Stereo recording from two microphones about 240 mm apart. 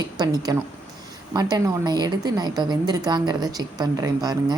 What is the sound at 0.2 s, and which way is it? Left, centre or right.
A woman's voice, centre.